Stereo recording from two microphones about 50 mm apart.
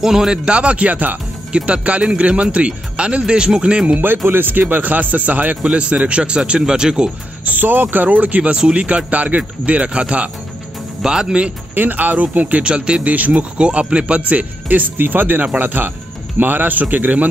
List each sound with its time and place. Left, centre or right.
0.0 s speech: centre
0.5 s speech: right
4.3 s speech: right
5.6 s speech: right
7.4 s speech: right; by 11.5 s centre
11.7 s speech: right